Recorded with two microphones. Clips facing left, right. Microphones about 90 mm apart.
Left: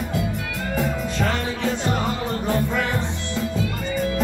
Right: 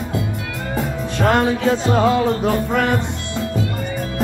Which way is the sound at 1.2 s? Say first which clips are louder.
Right 10 dB; 75° right (ahead or behind).